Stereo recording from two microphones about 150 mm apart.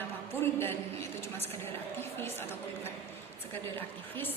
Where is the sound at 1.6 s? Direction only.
15° left (ahead or behind).